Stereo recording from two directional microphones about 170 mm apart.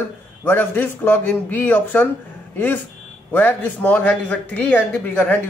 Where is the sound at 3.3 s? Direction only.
10° left (ahead or behind).